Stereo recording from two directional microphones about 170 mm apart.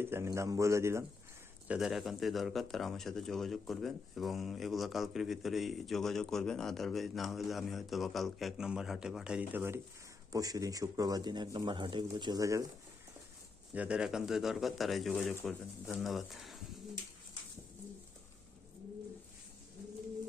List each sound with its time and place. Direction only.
0.0 s a man's voice: 15° right (ahead or behind)
1.7 s speech: centre (ahead or behind); by 12.6 s 20° right (ahead or behind)
13.7 s speech: 5° right (ahead or behind)